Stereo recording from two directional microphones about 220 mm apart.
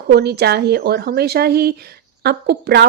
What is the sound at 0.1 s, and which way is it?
Speech, 50° right (ahead or behind).